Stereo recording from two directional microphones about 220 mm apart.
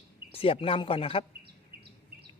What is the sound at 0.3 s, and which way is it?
Speech, 25° left (ahead or behind).